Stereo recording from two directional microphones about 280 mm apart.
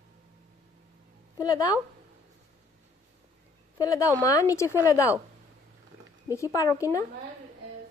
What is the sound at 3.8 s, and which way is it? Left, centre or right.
Speech, centre.